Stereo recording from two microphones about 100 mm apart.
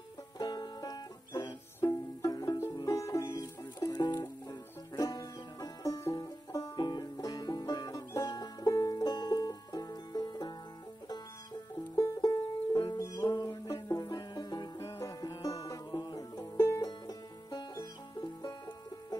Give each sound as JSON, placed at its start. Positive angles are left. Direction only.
{"t": 0.4, "sound": "music", "side_deg": 40}
{"t": 3.3, "sound": "music", "side_deg": 45}
{"t": 12.2, "sound": "music", "side_deg": 45}
{"t": 12.9, "sound": "banjo", "side_deg": 40}
{"t": 14.0, "sound": "music", "side_deg": 45}
{"t": 14.8, "sound": "music", "side_deg": 30}
{"t": 16.8, "sound": "music", "side_deg": 45}